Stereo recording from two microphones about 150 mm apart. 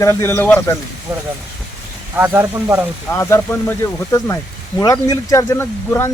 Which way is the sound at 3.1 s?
20° left (ahead or behind).